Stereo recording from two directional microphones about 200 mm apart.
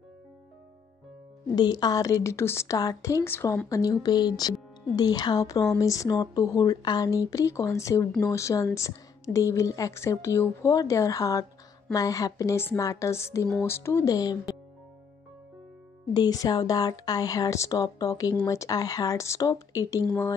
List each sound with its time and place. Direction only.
1.5 s a woman's voice: 20° left (ahead or behind)
16.1 s a woman's voice: 20° left (ahead or behind)